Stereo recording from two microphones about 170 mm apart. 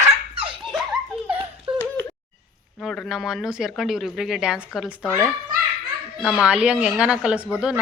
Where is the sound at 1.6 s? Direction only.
10° right (ahead or behind).